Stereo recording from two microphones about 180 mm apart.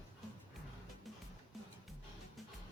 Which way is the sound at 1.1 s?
Centre (ahead or behind).